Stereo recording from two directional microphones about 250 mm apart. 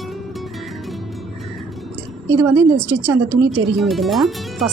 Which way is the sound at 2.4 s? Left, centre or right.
Centre.